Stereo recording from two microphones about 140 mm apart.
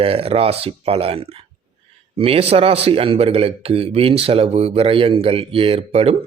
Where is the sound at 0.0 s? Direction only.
40° right (ahead or behind).